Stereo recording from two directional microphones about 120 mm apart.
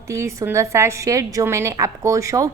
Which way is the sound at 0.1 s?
25° right (ahead or behind).